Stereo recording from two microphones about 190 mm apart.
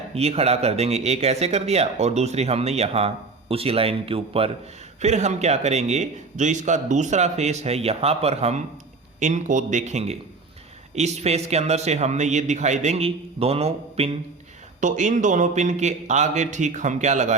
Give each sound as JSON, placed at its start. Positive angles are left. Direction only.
{"t": 0.1, "sound": "a man's voice", "side_deg": -30}